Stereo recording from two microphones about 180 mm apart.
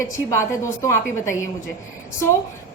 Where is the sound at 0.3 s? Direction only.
15° left (ahead or behind).